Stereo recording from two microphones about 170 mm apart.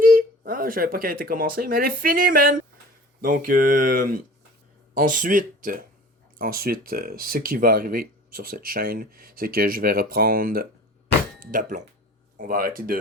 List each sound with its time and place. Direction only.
0.0 s speech: 55° right (ahead or behind)